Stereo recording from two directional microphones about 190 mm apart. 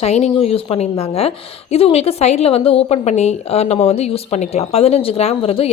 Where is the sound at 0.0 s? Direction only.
35° left (ahead or behind).